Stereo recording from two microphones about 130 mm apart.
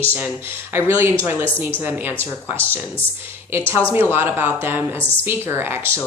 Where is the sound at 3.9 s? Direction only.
20° right (ahead or behind).